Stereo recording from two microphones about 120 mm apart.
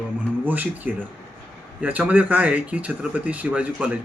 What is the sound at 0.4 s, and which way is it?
Speech, 15° right (ahead or behind).